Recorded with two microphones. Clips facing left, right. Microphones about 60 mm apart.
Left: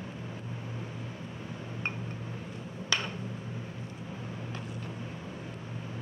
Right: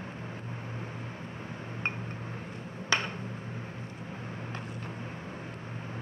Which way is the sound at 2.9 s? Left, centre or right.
Right.